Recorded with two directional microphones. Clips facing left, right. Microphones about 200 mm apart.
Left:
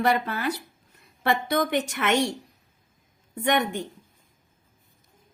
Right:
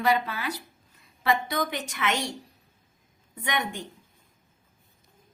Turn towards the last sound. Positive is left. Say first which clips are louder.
# left 7 dB
turn(degrees=55)  # may be behind; listen again after turning